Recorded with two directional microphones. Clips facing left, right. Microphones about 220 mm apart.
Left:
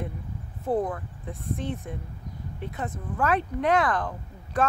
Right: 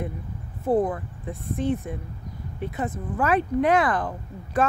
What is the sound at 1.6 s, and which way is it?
Speech, 5° right (ahead or behind).